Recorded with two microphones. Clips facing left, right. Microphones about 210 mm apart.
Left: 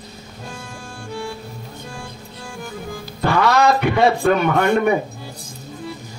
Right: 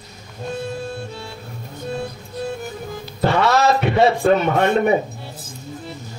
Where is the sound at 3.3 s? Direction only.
25° right (ahead or behind).